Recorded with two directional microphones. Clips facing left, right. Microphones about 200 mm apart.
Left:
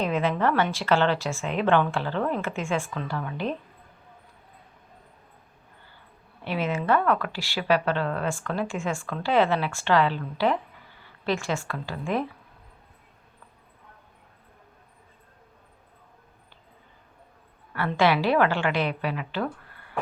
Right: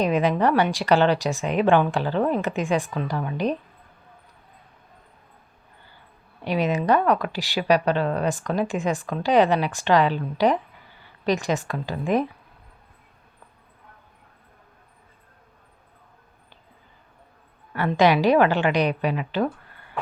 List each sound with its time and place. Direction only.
0.0 s speech: 15° right (ahead or behind)
6.4 s a woman's voice: 15° right (ahead or behind)
17.7 s speech: 20° right (ahead or behind)